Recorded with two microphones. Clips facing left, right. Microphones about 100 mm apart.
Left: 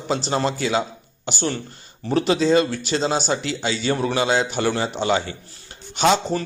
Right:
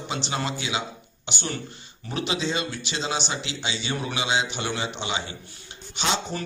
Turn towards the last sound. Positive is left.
turn(degrees=45)  # may be behind; listen again after turning